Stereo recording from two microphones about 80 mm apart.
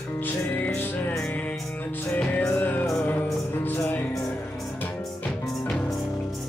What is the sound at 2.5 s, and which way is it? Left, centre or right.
Music, left.